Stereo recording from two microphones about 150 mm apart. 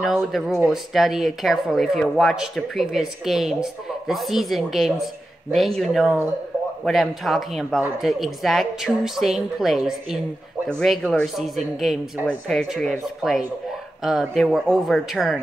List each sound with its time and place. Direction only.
0.0 s speech: centre (ahead or behind)